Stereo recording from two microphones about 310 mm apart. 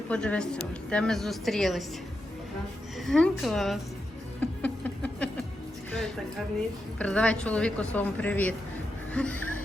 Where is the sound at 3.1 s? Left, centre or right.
Centre.